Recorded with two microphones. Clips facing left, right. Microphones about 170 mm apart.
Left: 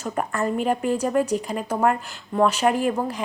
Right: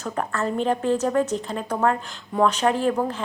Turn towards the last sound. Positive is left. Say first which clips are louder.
# even
turn(degrees=10)  # may be behind; listen again after turning